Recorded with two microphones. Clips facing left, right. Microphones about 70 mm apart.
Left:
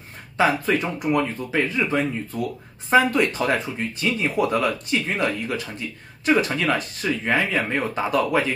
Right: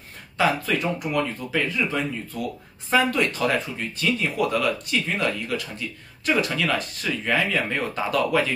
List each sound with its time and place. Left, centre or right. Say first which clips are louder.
0.4 s speech: left 2 dB; left